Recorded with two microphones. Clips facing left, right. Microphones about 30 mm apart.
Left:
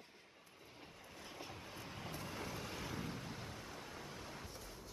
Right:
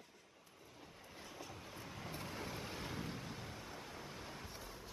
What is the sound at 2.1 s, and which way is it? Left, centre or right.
Vehicle, centre.